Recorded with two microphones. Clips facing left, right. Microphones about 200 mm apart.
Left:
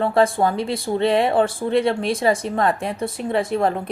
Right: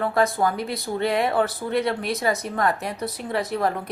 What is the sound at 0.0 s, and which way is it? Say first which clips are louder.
A woman's voice: left 4 dB; 30° left (ahead or behind).